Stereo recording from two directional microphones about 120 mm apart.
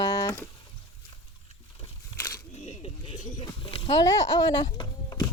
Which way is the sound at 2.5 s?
75° left (ahead or behind).